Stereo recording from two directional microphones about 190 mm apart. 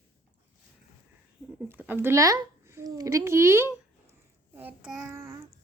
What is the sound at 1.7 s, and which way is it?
Speech, 10° right (ahead or behind).